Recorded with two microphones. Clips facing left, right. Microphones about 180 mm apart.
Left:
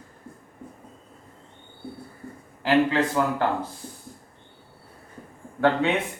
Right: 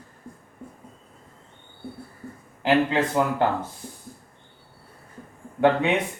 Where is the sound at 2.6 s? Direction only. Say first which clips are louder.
Even; 20° right (ahead or behind).